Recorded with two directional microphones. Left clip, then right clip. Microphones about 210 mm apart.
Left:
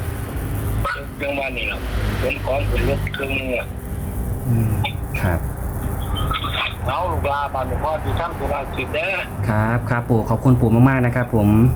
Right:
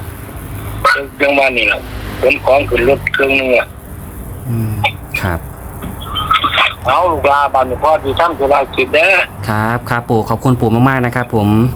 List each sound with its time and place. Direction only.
0.8 s a man's voice: 40° right (ahead or behind)
4.8 s chicken: 40° right (ahead or behind)
6.1 s speech: 35° right (ahead or behind)